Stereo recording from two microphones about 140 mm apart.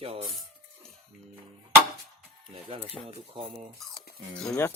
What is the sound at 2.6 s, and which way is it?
Speech, 45° right (ahead or behind).